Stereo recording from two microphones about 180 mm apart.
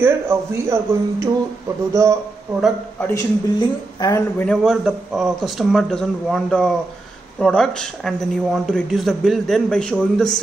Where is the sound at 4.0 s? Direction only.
20° left (ahead or behind).